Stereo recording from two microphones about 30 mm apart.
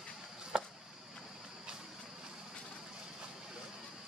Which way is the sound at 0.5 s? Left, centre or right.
Right.